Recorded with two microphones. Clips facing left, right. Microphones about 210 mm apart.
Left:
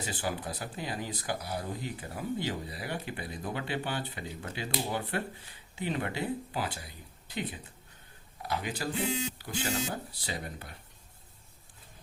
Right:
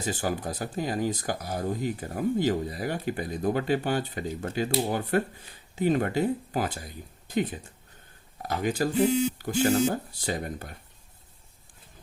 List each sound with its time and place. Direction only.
0.0 s speech: 45° right (ahead or behind)